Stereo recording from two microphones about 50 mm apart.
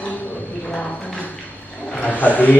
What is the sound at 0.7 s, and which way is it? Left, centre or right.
Speech, left.